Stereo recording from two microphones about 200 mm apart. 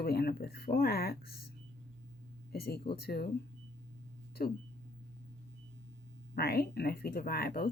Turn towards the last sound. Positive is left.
turn(degrees=50)  # may be behind; listen again after turning